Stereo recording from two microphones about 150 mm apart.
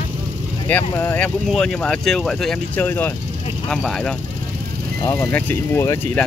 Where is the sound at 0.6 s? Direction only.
10° left (ahead or behind).